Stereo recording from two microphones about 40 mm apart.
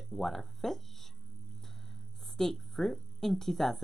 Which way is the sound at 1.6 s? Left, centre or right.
Centre.